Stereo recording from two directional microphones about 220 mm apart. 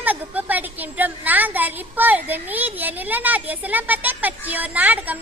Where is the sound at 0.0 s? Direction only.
10° right (ahead or behind).